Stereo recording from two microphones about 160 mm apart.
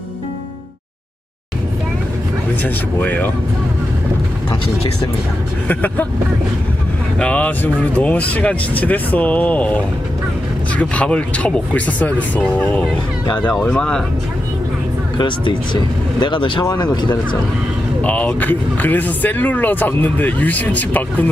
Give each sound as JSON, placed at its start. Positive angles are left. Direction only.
{"t": 2.6, "sound": "speech", "side_deg": 10}
{"t": 5.7, "sound": "speech", "side_deg": 10}
{"t": 7.2, "sound": "speech", "side_deg": 10}
{"t": 15.1, "sound": "speech", "side_deg": 30}
{"t": 18.0, "sound": "speech", "side_deg": 10}